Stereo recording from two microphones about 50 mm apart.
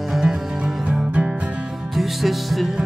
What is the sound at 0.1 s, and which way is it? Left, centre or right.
Music, centre.